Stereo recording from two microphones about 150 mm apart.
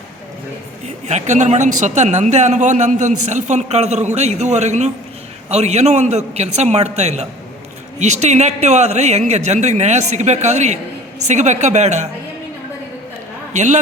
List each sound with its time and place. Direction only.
0.9 s a man's voice: 50° right (ahead or behind)
13.5 s a man's voice: 50° right (ahead or behind)